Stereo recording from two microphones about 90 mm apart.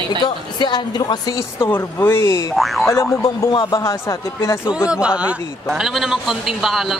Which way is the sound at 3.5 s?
55° left (ahead or behind).